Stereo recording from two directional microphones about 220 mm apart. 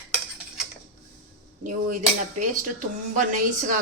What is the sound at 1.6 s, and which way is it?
Speech, 35° right (ahead or behind).